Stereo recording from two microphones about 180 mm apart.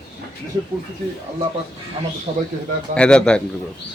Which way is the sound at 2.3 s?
30° right (ahead or behind).